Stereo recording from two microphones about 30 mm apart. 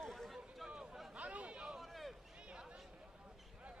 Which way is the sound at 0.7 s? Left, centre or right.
Right.